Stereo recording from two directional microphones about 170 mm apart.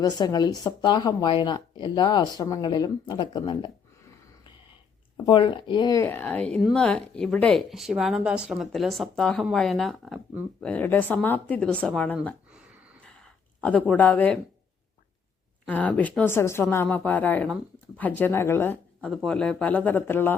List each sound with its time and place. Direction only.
0.0 s speech: 20° left (ahead or behind)
5.1 s speech: 25° left (ahead or behind); by 12.1 s 5° left (ahead or behind)
13.1 s a sound: 5° left (ahead or behind)
15.6 s speech: 10° left (ahead or behind)